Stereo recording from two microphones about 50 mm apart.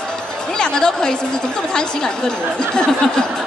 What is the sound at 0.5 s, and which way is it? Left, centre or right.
A woman's voice, centre.